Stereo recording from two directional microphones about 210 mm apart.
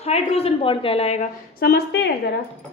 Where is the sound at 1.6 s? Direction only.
50° left (ahead or behind).